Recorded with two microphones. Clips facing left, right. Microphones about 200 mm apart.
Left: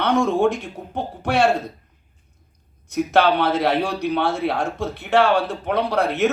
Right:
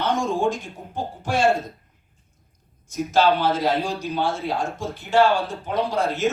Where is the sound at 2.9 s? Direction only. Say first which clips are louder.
Left 2 dB; 65° left (ahead or behind).